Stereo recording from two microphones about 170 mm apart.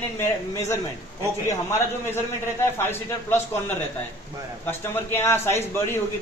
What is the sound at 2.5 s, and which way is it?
A man's voice, 15° left (ahead or behind).